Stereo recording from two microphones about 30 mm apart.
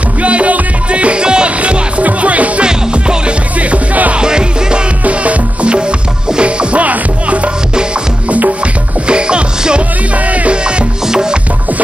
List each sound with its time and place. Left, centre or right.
0.2 s music: right
1.6 s music: right
2.6 s music: right
3.7 s music: right
4.2 s music: right
5.0 s music: right
5.7 s music: right
8.3 s music: right
9.0 s music: right
10.1 s music: right
10.5 s music: right